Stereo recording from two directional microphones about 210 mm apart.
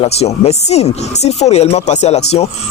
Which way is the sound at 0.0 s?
30° left (ahead or behind).